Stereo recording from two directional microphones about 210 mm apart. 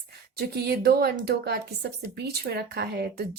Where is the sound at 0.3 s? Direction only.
50° right (ahead or behind).